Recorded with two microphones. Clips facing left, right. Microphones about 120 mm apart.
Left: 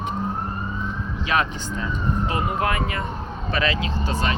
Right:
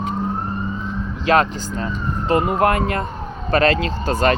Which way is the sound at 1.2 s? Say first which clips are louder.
Right 7 dB; 35° right (ahead or behind).